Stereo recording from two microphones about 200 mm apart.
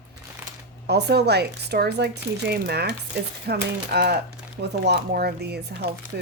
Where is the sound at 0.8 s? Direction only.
55° right (ahead or behind).